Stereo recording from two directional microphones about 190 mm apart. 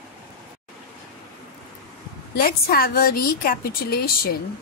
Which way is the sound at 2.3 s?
50° left (ahead or behind).